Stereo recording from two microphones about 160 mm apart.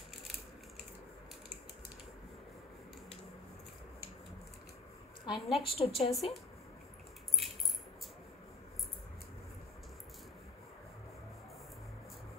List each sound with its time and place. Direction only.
5.2 s a woman's voice: 35° left (ahead or behind)
6.1 s a woman's voice: centre (ahead or behind)